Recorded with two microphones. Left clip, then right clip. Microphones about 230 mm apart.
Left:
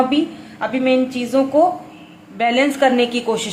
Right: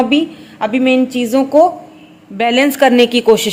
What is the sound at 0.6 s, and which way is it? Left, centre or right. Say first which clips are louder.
A woman's voice: right 4 dB; right.